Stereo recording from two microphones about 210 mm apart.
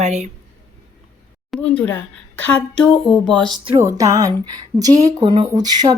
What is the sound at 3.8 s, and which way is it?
Music, 15° right (ahead or behind).